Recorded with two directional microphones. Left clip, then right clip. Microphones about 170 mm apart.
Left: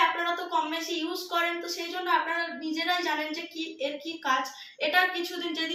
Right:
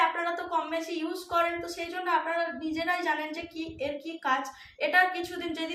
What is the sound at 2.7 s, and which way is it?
Speech, 20° right (ahead or behind).